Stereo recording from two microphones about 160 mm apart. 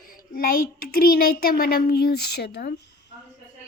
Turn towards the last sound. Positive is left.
turn(degrees=90)